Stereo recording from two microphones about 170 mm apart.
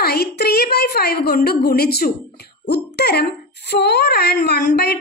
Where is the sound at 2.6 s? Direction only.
80° left.